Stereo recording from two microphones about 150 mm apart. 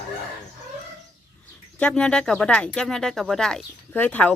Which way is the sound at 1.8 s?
5° left (ahead or behind).